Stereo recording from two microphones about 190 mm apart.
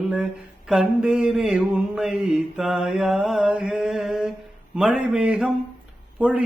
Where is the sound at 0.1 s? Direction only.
5° right (ahead or behind).